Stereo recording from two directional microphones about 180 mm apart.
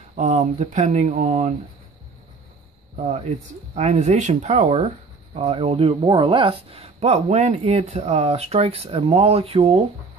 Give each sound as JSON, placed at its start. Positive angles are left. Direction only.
{"t": 0.1, "sound": "speech", "side_deg": -40}
{"t": 3.0, "sound": "speech", "side_deg": -35}